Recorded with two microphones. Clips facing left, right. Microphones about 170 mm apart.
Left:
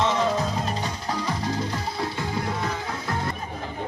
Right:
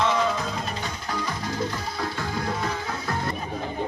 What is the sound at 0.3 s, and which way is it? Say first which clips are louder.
Music: left 3 dB; 35° left (ahead or behind).